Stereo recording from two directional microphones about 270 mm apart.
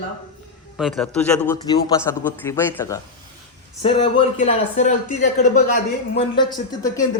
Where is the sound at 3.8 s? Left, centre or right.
Left.